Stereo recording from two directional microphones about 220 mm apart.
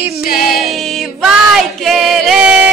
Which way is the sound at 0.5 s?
Centre (ahead or behind).